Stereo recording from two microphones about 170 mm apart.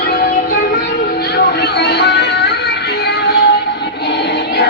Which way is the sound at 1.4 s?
80° left.